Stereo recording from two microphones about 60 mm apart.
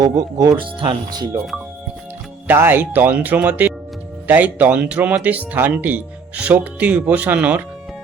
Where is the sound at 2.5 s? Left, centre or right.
Right.